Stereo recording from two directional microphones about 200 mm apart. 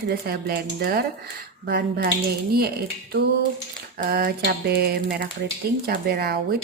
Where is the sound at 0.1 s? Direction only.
50° right (ahead or behind).